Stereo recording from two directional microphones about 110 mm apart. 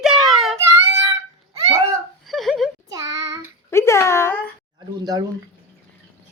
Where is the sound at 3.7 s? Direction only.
25° left (ahead or behind).